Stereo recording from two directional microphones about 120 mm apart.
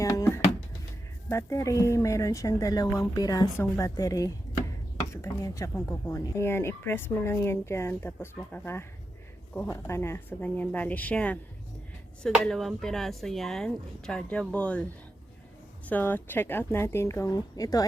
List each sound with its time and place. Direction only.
0.0 s music: 30° left (ahead or behind)
1.3 s a woman's voice: 25° left (ahead or behind)
12.5 s speech: 5° left (ahead or behind)
15.9 s speech: 15° left (ahead or behind); by 17.8 s 30° left (ahead or behind)